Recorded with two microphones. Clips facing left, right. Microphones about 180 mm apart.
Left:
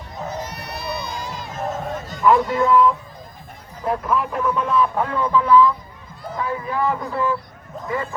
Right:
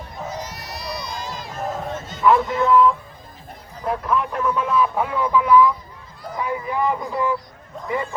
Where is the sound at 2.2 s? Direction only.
Centre (ahead or behind).